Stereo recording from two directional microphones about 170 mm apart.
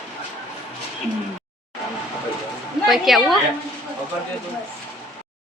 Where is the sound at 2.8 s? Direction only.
Centre (ahead or behind).